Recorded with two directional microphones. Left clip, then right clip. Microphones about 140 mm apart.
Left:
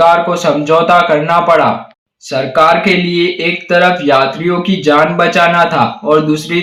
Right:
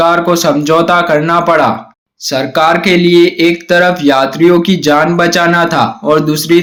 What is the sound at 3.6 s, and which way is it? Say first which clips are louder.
Speech: left 2 dB; 30° right (ahead or behind).